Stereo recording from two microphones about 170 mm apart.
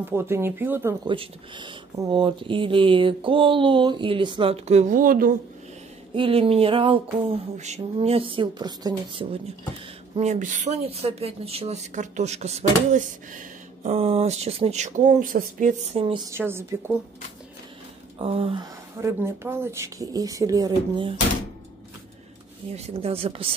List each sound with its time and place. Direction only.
0.0 s speech: 15° right (ahead or behind)
1.0 s speech: 30° right (ahead or behind); by 5.3 s 55° right (ahead or behind)
6.1 s speech: 30° right (ahead or behind)
7.5 s speech: 40° right (ahead or behind)
10.1 s speech: 40° right (ahead or behind)
13.9 s speech: 35° right (ahead or behind)
16.3 s speech: 15° right (ahead or behind)
18.2 s speech: 35° right (ahead or behind)
18.9 s speech: 15° right (ahead or behind)
22.7 s speech: 40° right (ahead or behind)